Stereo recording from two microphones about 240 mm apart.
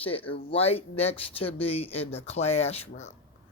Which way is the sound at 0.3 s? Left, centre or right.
Left.